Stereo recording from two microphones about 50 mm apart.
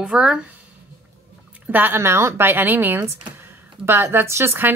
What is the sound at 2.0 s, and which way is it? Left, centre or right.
A woman's voice, right.